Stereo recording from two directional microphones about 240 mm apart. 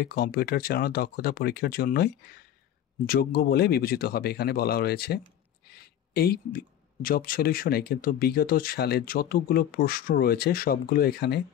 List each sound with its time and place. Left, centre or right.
0.0 s speech: left